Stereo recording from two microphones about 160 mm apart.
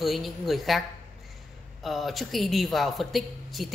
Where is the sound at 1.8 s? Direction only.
Centre (ahead or behind).